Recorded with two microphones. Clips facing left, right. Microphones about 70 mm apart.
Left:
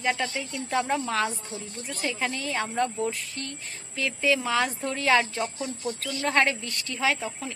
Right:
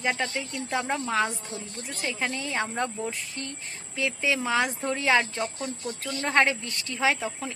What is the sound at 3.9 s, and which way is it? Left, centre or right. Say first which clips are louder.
A woman's voice: left 2 dB; centre.